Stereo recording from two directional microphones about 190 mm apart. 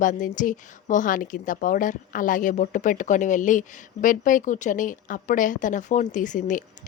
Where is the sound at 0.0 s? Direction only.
45° left (ahead or behind).